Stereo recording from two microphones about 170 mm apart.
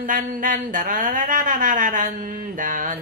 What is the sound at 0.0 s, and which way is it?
Speech, 50° right (ahead or behind).